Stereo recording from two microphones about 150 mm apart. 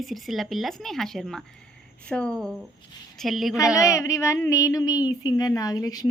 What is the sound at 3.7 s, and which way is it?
Speech, 20° left (ahead or behind).